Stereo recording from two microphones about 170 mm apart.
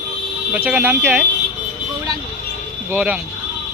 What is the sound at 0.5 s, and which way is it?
Speech, 10° right (ahead or behind).